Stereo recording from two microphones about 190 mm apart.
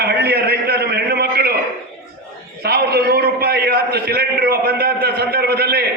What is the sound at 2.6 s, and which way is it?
A man's voice, 55° right (ahead or behind).